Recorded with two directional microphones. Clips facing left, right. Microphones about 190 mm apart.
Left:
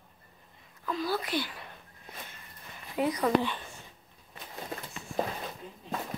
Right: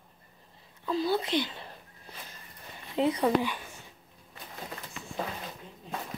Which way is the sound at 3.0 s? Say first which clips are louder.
Right 2 dB; 25° right (ahead or behind).